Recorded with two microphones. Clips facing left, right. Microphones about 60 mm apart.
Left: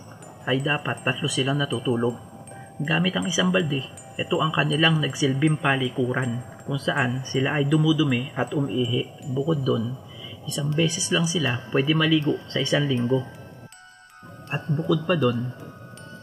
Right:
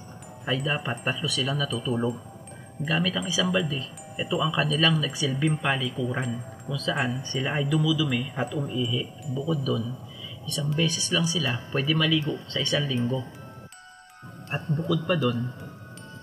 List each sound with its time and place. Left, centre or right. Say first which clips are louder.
0.7 s speech: left 3 dB; centre
5.4 s speech: left 2 dB; centre
5.7 s speech: left 4 dB; centre
12.9 s speech: left 5 dB; centre
14.5 s speech: left 3 dB; centre